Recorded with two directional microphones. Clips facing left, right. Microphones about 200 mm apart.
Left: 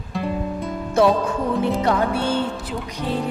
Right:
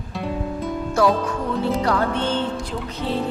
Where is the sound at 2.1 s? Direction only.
10° left (ahead or behind).